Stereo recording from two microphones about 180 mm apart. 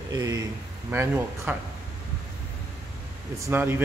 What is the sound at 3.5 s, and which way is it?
Speech, 10° right (ahead or behind).